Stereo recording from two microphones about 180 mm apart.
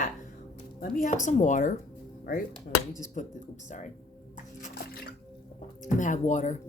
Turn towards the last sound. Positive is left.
turn(degrees=45)  # may be behind; listen again after turning